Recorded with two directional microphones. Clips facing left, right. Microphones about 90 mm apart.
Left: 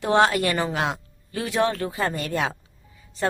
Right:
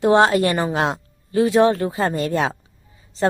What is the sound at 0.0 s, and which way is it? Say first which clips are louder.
Speech: right 5 dB; 20° right (ahead or behind).